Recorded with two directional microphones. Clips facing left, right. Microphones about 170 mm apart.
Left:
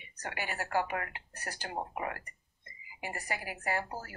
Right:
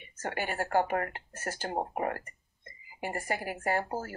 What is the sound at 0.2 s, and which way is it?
Speech, 45° right (ahead or behind).